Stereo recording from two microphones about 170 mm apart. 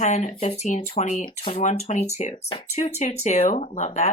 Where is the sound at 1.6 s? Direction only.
40° left (ahead or behind).